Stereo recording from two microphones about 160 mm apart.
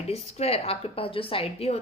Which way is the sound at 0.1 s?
40° left (ahead or behind).